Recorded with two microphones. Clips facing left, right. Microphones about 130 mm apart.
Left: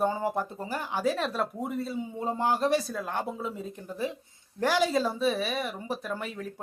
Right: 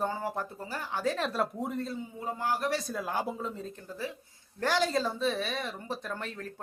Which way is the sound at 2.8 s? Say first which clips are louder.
Even; centre (ahead or behind).